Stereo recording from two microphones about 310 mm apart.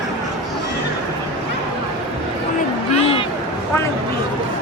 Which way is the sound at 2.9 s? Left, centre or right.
Centre.